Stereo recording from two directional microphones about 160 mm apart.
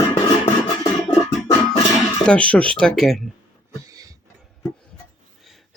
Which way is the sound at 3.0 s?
Centre (ahead or behind).